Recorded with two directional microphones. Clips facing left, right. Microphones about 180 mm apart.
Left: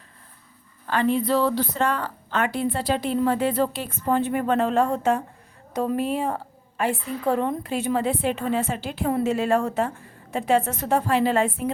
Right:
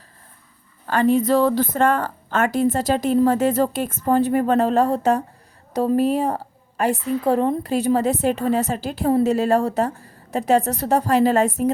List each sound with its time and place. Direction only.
0.9 s a woman's voice: 45° right (ahead or behind)